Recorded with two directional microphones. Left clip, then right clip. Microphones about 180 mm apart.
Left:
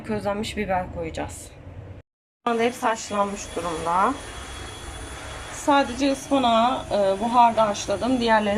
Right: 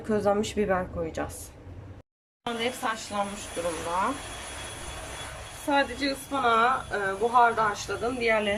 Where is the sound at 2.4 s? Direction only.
10° left (ahead or behind).